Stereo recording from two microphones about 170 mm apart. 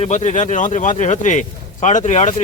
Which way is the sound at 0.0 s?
40° left (ahead or behind).